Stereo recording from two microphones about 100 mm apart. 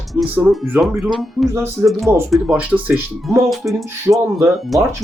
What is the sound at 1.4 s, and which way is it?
Speech, 30° right (ahead or behind).